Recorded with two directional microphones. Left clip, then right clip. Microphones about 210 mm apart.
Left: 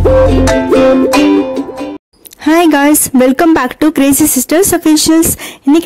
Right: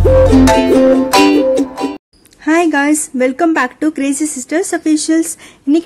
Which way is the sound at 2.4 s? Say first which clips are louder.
Left 4 dB; 40° left (ahead or behind).